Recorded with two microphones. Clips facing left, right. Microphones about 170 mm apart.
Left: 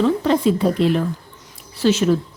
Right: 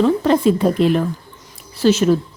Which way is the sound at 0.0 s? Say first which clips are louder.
Right 2 dB; 50° right (ahead or behind).